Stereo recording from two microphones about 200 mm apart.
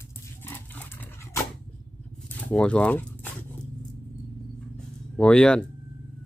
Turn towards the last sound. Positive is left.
turn(degrees=5)  # may be behind; listen again after turning